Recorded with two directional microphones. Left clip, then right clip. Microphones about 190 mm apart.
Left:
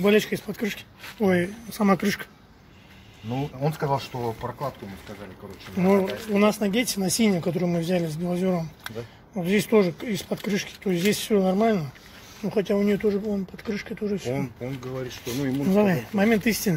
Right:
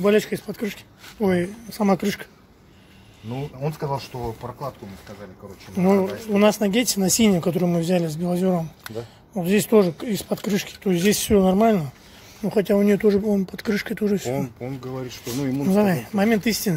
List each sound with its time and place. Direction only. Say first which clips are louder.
0.0 s speech: right 2 dB; 5° right (ahead or behind)
3.3 s speech: left 1 dB; 5° right (ahead or behind)
5.8 s speech: right 2 dB; 20° right (ahead or behind)
15.6 s speech: right 1 dB; 15° right (ahead or behind)